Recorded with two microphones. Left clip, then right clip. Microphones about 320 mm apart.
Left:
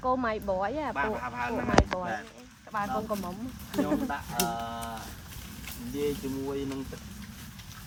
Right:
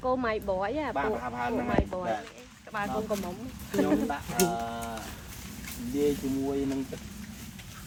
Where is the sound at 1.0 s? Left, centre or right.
Centre.